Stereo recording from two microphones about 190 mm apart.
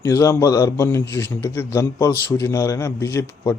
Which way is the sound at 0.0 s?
15° left (ahead or behind).